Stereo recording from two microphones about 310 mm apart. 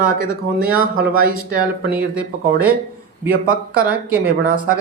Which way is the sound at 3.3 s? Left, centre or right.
Right.